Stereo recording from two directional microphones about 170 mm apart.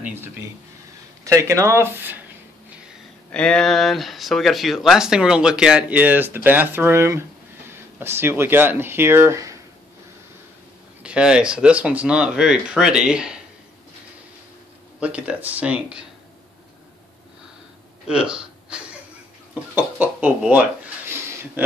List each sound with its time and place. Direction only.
0.0 s a sound: 15° right (ahead or behind)
1.2 s speech: 15° right (ahead or behind)
3.3 s speech: 5° left (ahead or behind); by 9.6 s 15° right (ahead or behind)
11.0 s speech: 5° right (ahead or behind)
15.0 s speech: 5° right (ahead or behind)
18.0 s speech: 5° right (ahead or behind)